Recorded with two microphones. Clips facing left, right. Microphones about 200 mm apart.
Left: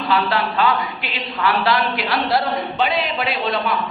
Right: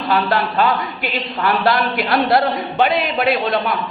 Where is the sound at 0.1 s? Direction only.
45° right (ahead or behind).